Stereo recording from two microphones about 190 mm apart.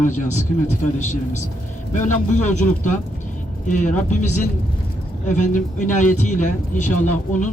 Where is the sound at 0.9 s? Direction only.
40° left (ahead or behind).